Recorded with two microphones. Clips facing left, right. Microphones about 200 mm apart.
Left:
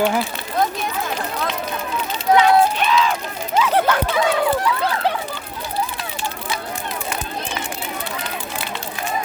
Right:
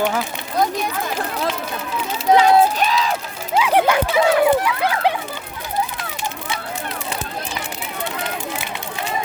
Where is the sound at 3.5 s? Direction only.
10° right (ahead or behind).